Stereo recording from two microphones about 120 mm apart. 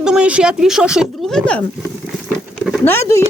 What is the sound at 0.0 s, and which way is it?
Speech, 5° right (ahead or behind).